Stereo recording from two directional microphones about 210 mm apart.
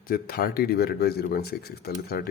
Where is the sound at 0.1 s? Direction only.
45° left (ahead or behind).